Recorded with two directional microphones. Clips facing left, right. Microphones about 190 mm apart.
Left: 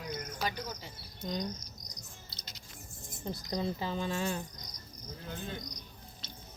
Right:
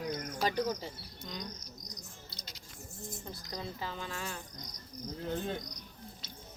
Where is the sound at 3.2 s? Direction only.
20° left (ahead or behind).